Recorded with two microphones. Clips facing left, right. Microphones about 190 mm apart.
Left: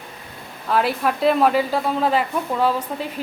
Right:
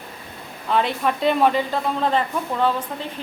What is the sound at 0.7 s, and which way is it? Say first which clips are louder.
A woman's voice: left 1 dB; 5° left (ahead or behind).